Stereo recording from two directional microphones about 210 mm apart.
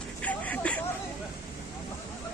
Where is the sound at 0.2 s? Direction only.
5° left (ahead or behind).